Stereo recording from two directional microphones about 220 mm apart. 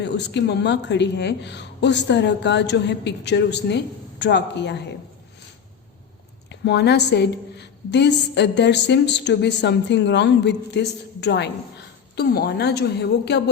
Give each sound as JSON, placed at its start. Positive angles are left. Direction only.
{"t": 0.0, "sound": "a woman's voice", "side_deg": 50}
{"t": 6.5, "sound": "a woman's voice", "side_deg": 50}